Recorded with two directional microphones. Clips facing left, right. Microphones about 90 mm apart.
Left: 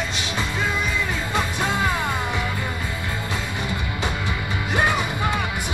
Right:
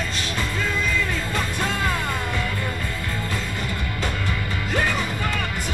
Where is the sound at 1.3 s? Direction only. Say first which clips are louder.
Left 2 dB; 20° left (ahead or behind).